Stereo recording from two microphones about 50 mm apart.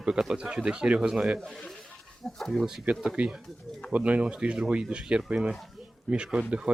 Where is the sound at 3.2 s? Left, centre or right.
Right.